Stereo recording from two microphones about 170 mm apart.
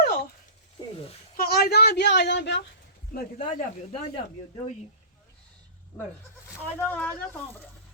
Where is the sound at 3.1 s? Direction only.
55° left (ahead or behind).